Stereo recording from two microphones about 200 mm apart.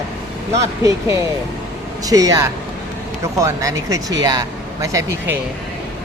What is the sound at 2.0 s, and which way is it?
Speech, 15° right (ahead or behind).